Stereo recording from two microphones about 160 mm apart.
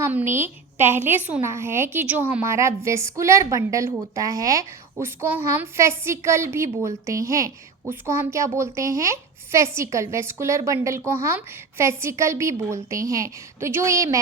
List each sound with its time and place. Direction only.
0.0 s a child's voice: 10° right (ahead or behind)